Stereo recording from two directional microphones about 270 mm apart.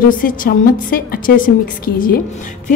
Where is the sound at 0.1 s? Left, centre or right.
Left.